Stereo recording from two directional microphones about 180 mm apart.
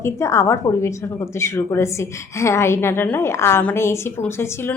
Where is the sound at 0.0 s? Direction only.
15° left (ahead or behind).